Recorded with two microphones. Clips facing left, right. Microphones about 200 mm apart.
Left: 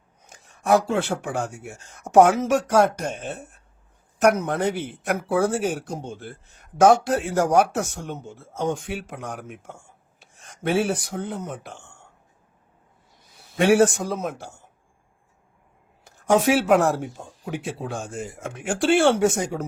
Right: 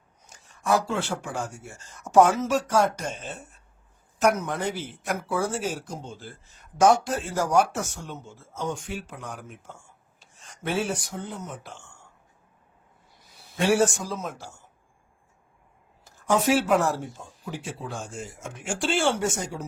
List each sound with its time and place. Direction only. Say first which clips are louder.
0.3 s speech: left 5 dB; 60° left (ahead or behind)
13.6 s speech: left 5 dB; 60° left (ahead or behind)
16.3 s speech: left 4 dB; 65° left (ahead or behind)